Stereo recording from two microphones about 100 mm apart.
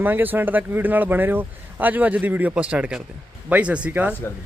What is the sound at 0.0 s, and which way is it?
Speech, 20° right (ahead or behind).